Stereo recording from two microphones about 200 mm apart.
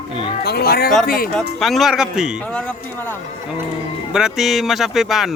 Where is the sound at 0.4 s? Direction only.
50° left (ahead or behind).